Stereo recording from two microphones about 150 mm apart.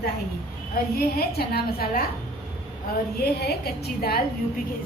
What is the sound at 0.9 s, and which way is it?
A woman's voice, 90° left.